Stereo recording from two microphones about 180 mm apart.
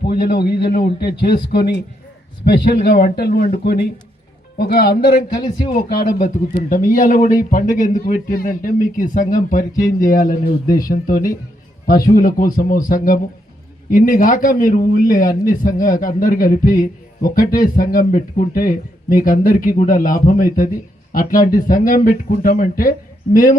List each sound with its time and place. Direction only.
0.0 s a man's voice: 60° left (ahead or behind)
5.3 s a man's voice: 25° left (ahead or behind)
6.2 s a man's voice: 45° left (ahead or behind)